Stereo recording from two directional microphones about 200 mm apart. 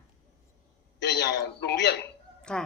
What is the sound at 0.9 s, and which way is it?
A man's voice, 55° left (ahead or behind).